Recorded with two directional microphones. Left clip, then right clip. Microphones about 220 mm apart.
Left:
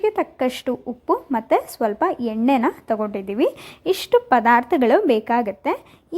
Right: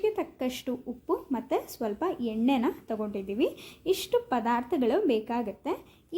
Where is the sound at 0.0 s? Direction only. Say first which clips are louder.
Left 9 dB; 25° left (ahead or behind).